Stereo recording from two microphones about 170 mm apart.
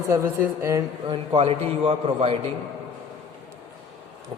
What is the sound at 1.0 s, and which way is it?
A man's voice, 30° right (ahead or behind).